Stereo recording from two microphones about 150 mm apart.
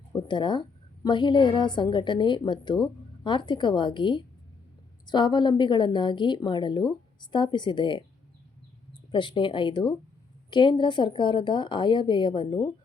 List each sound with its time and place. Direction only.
0.3 s a woman's voice: 30° left (ahead or behind)
9.1 s a woman's voice: 35° left (ahead or behind)